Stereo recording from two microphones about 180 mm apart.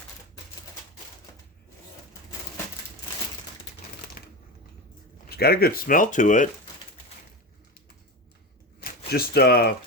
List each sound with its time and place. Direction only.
4.2 s typewriter: 55° left (ahead or behind)
5.2 s speech: 60° left (ahead or behind)
9.0 s speech: 60° left (ahead or behind)